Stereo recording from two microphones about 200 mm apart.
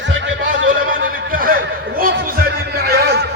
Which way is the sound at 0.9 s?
45° right (ahead or behind).